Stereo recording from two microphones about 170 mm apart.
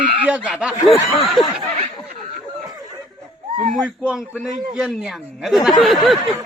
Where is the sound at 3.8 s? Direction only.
5° right (ahead or behind).